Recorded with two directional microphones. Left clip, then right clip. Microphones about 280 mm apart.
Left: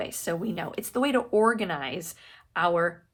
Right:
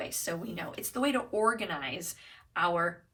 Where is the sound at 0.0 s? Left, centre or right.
Centre.